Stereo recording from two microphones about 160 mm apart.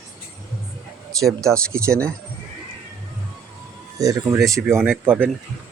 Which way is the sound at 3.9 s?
20° right (ahead or behind).